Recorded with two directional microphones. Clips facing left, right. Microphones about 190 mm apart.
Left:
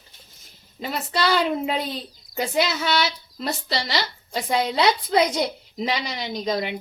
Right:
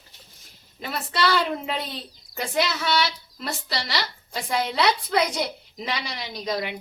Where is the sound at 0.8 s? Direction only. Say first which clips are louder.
Left 3 dB; 25° left (ahead or behind).